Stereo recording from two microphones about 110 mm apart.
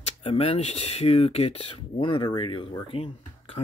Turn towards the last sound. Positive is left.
turn(degrees=55)  # may be behind; listen again after turning